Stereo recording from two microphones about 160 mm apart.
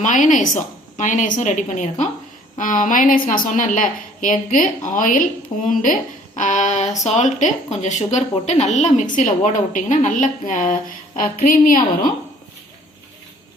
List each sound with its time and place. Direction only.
0.0 s a woman's voice: 50° left (ahead or behind)